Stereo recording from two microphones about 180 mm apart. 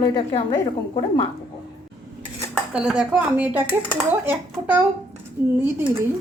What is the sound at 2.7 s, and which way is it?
Speech, 5° right (ahead or behind).